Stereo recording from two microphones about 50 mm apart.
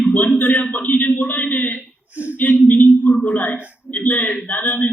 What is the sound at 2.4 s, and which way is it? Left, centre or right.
A man's voice, left.